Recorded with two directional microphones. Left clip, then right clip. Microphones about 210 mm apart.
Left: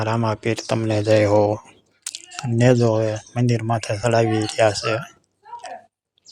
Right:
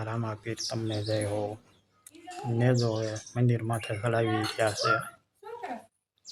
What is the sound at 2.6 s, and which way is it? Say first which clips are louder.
Speech: left 12 dB; 35° left (ahead or behind).